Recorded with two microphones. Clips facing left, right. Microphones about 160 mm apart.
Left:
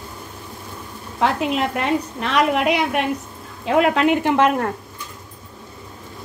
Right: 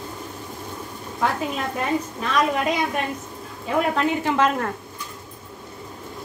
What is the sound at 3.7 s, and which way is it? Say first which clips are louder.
A woman's voice: left 5 dB; 80° left.